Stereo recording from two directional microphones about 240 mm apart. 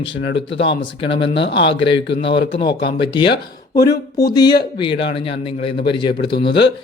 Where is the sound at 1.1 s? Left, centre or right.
Left.